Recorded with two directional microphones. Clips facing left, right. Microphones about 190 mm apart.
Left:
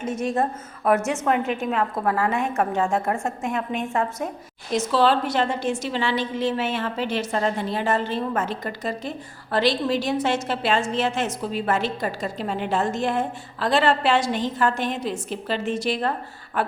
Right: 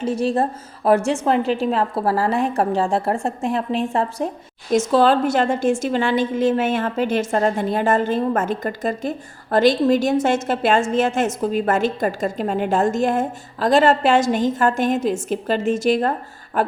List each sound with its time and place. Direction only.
0.0 s a woman's voice: 30° right (ahead or behind)
4.7 s a woman's voice: 50° right (ahead or behind)
16.6 s a sound: 45° right (ahead or behind)